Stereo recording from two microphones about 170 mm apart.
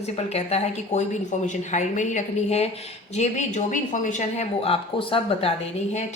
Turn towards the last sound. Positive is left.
turn(degrees=40)  # may be behind; listen again after turning